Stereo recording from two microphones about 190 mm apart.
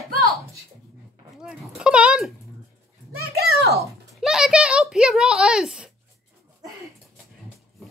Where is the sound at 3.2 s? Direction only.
55° right (ahead or behind).